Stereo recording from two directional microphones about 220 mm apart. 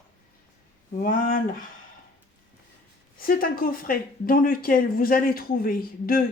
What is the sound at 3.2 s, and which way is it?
Speech, 40° left (ahead or behind).